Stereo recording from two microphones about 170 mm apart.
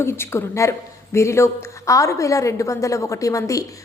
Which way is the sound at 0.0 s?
15° left (ahead or behind).